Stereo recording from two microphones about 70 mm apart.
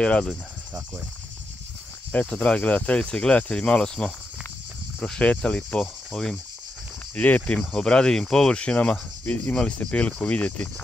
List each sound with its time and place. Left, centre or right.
0.0 s speech: centre
2.2 s speech: centre
7.2 s speech: left